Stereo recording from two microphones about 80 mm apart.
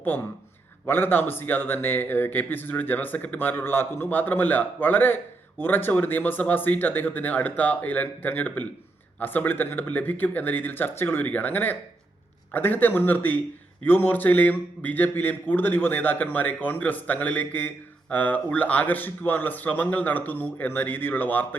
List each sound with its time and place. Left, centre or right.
0.9 s speech: left